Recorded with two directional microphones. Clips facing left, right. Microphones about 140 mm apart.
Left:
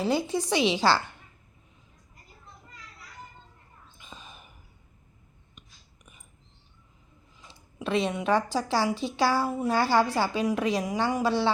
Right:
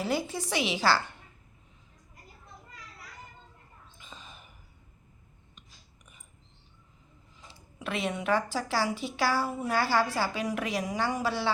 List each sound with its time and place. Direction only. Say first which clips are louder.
0.0 s a woman's voice: left 4 dB; 20° left (ahead or behind)
4.0 s a sound: left 2 dB; 15° left (ahead or behind)
7.8 s a woman's voice: left 5 dB; 20° left (ahead or behind)